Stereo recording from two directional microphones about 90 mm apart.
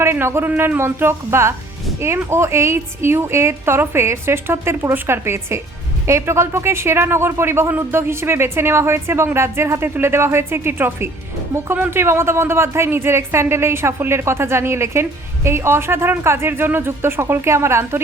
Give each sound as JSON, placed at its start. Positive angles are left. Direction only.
{"t": 0.0, "sound": "speech", "side_deg": -30}